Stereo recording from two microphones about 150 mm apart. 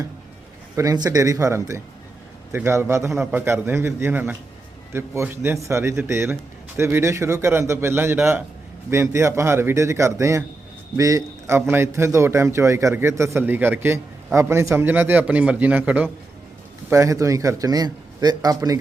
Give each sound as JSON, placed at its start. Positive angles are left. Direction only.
{"t": 0.8, "sound": "a man's voice", "side_deg": -25}